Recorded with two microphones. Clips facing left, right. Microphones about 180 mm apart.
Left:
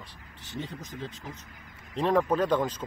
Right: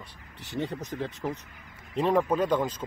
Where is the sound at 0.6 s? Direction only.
70° right (ahead or behind).